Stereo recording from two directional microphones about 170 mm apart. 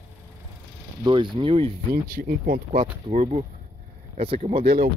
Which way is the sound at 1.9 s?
60° right (ahead or behind).